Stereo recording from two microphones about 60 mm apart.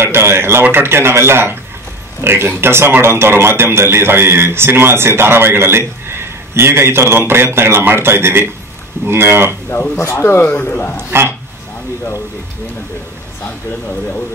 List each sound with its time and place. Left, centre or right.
0.0 s speech: right
9.9 s speech: left
10.6 s a man's voice: left
11.0 s speech: right